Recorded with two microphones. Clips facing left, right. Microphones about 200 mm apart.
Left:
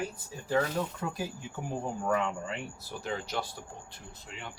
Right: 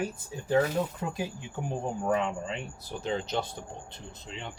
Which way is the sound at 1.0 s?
15° right (ahead or behind).